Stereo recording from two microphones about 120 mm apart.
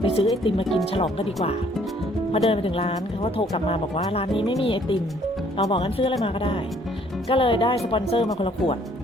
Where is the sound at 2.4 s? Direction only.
50° left (ahead or behind).